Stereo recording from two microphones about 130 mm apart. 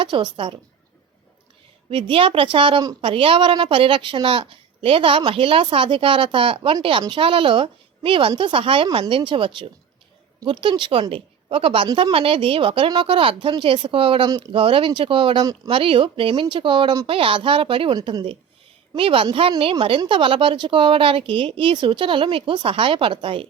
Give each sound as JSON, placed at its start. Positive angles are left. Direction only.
{"t": 0.0, "sound": "a woman's voice", "side_deg": -40}
{"t": 1.9, "sound": "a woman's voice", "side_deg": -40}
{"t": 14.3, "sound": "speech", "side_deg": -30}
{"t": 14.5, "sound": "a woman's voice", "side_deg": -45}
{"t": 15.7, "sound": "a woman's voice", "side_deg": -45}